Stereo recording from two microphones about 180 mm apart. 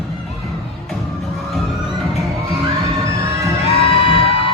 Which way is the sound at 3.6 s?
30° left (ahead or behind).